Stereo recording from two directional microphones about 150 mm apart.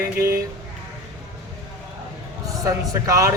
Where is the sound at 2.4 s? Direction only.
20° right (ahead or behind).